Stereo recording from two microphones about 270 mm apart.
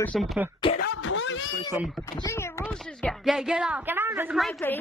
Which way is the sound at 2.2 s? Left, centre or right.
Centre.